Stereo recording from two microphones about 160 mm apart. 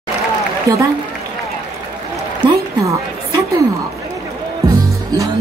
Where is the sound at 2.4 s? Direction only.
20° right (ahead or behind).